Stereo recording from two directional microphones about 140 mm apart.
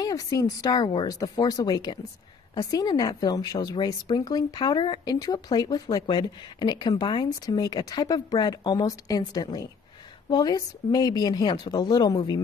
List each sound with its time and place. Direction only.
0.0 s a woman's voice: 25° left (ahead or behind)